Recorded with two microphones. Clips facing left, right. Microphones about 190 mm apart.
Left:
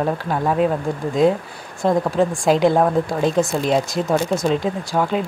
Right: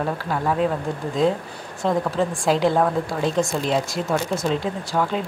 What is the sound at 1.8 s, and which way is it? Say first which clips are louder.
Speech: left 4 dB; 15° left (ahead or behind).